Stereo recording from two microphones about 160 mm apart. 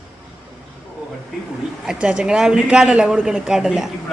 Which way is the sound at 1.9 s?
5° right (ahead or behind).